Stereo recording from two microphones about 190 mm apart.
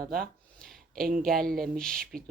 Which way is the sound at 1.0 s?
50° right (ahead or behind).